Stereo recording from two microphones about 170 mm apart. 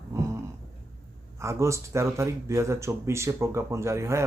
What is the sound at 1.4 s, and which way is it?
Speech, 15° right (ahead or behind).